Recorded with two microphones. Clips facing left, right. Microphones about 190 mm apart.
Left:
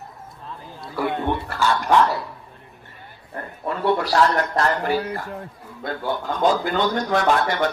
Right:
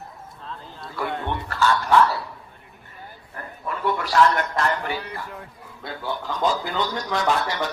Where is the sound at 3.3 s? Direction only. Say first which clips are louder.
Left 4 dB; 35° left (ahead or behind).